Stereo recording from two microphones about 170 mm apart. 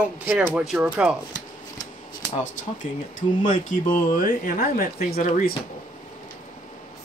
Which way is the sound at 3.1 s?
45° left (ahead or behind).